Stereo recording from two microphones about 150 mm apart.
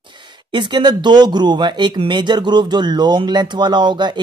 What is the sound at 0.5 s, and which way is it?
Speech, 30° right (ahead or behind).